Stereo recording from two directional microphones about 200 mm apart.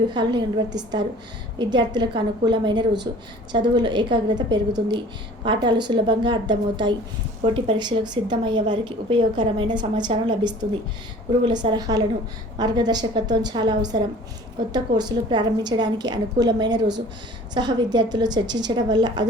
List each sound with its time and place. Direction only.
0.1 s a woman's voice: 20° right (ahead or behind)